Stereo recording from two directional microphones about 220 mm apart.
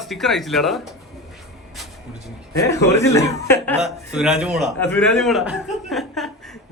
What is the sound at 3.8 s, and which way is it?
Speech, 5° right (ahead or behind).